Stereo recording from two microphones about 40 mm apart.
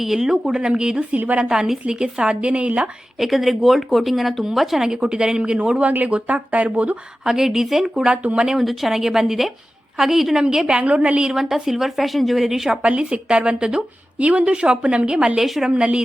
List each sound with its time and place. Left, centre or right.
0.0 s a woman's voice: centre; by 2.9 s right
3.2 s speech: centre
4.8 s a woman's voice: centre
6.1 s speech: right
7.3 s a woman's voice: centre
8.1 s speech: right
8.5 s a woman's voice: centre
10.8 s speech: right
11.3 s a woman's voice: centre
12.9 s a woman's voice: right
15.4 s a woman's voice: centre
15.7 s a woman's voice: right